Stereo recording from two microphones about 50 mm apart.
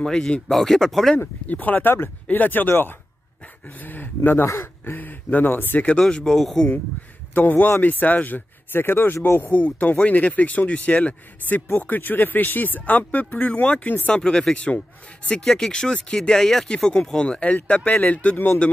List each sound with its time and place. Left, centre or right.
0.0 s speech: centre
1.2 s speech: left
5.8 s speech: left
7.3 s speech: left
9.5 s speech: left
14.1 s speech: centre
16.6 s speech: centre